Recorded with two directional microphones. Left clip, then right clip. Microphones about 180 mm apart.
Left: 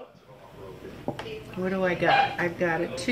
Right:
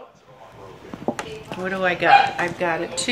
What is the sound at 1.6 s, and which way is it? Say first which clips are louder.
Speech: right 5 dB; 30° left (ahead or behind).